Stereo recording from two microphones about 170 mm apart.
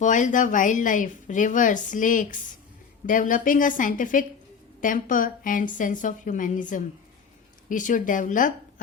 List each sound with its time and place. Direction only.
0.0 s a woman's voice: 50° left (ahead or behind)